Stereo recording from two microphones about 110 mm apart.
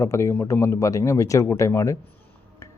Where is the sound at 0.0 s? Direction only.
25° left (ahead or behind).